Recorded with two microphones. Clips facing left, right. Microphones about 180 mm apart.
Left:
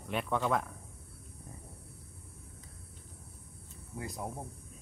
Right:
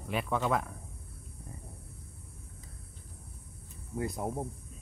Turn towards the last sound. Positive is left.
turn(degrees=-55)  # may be behind; listen again after turning